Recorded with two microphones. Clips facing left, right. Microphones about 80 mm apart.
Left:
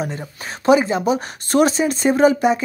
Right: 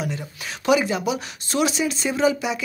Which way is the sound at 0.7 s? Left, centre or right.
Left.